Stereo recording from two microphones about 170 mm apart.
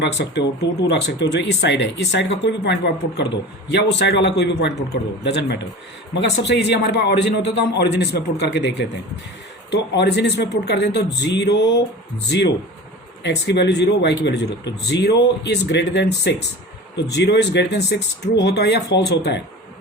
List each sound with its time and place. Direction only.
0.0 s a man's voice: 90° left
13.2 s a man's voice: 90° left